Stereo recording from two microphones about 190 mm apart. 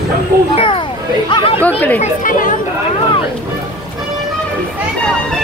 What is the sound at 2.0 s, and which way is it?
Speech, 45° left (ahead or behind).